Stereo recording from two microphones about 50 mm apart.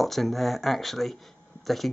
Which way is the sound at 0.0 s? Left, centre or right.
Centre.